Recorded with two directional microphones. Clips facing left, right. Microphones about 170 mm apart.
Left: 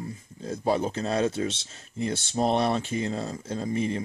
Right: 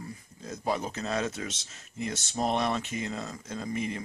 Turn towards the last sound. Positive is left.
turn(degrees=30)  # may be behind; listen again after turning